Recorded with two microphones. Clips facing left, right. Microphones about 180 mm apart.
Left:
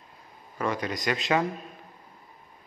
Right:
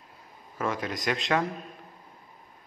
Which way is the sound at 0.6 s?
Centre (ahead or behind).